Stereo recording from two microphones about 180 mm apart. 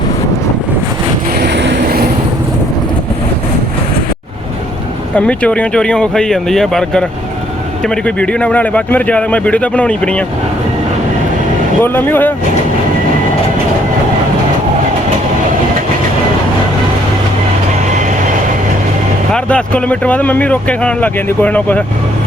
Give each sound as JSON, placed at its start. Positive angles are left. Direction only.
{"t": 1.4, "sound": "vehicle", "side_deg": -70}
{"t": 5.1, "sound": "speech", "side_deg": 5}
{"t": 11.8, "sound": "speech", "side_deg": 10}
{"t": 19.3, "sound": "speech", "side_deg": 5}